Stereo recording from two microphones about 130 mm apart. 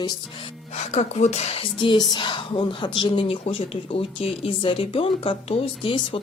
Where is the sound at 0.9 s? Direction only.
60° left (ahead or behind).